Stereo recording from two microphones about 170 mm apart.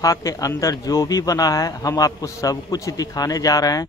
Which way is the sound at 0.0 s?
20° left (ahead or behind).